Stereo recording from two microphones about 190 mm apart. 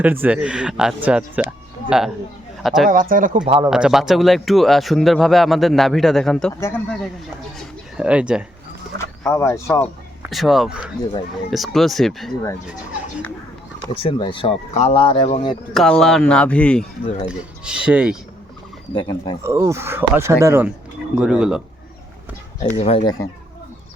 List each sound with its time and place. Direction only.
0.0 s speech: 10° right (ahead or behind)
2.9 s speech: 45° right (ahead or behind)
3.7 s speech: 5° right (ahead or behind)
7.9 s speech: 5° right (ahead or behind)
9.0 s speech: 15° left (ahead or behind)
10.2 s speech: centre (ahead or behind)
12.3 s speech: 15° left (ahead or behind)
13.8 s speech: 30° left (ahead or behind)
15.7 s speech: centre (ahead or behind)
17.2 s speech: 5° right (ahead or behind)
18.9 s speech: 25° left (ahead or behind)
19.4 s speech: 15° right (ahead or behind)
22.7 s speech: 30° left (ahead or behind)